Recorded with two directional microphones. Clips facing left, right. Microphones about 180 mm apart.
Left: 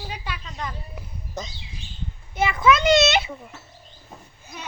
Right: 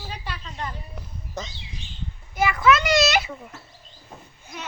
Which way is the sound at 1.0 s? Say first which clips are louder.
Even; 5° left (ahead or behind).